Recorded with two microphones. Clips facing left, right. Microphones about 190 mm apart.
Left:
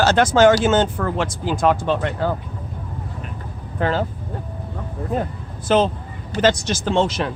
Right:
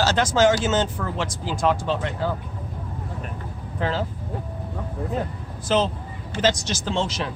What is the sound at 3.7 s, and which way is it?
Speech, 55° left (ahead or behind).